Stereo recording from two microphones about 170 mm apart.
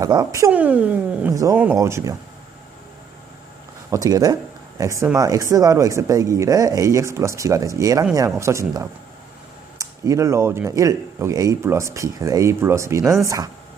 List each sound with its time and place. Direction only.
0.0 s speech: 20° right (ahead or behind)
1.3 s speech: 20° right (ahead or behind)
3.8 s speech: 20° right (ahead or behind)